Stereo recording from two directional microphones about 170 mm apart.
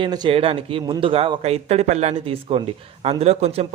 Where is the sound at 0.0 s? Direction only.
25° right (ahead or behind).